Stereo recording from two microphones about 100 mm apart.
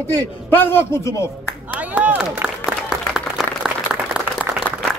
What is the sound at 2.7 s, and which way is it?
Applause, 5° right (ahead or behind).